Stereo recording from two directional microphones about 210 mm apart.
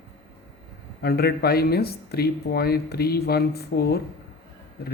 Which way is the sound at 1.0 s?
50° left (ahead or behind).